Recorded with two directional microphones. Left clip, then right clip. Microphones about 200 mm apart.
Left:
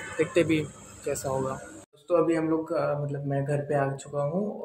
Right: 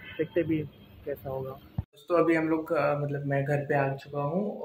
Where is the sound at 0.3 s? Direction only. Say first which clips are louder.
Left 4 dB; 10° left (ahead or behind).